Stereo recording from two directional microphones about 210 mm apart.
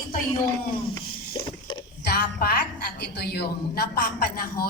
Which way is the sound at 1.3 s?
20° left (ahead or behind).